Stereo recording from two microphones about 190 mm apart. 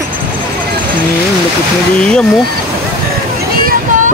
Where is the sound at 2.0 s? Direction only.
5° left (ahead or behind).